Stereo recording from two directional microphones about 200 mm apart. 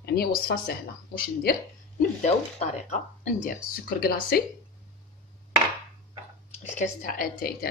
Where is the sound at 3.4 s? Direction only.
50° left (ahead or behind).